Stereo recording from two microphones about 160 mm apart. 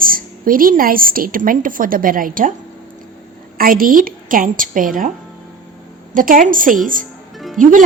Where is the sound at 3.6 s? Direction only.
60° right (ahead or behind).